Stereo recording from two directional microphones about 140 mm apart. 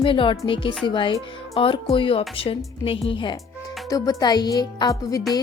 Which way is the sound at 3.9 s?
25° left (ahead or behind).